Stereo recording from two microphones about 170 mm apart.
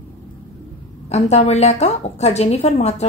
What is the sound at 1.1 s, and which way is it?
A woman's voice, 40° left (ahead or behind).